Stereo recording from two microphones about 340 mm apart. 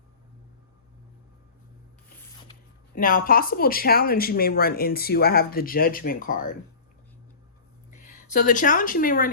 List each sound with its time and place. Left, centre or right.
3.0 s speech: left
7.9 s speech: left